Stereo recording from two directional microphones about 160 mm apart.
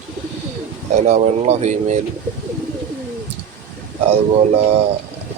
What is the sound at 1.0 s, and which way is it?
Speech, 45° right (ahead or behind).